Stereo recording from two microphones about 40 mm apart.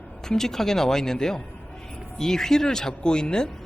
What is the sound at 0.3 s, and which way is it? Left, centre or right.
Speech, centre.